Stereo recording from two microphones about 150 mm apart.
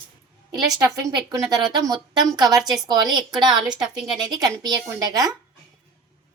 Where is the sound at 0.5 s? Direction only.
25° right (ahead or behind).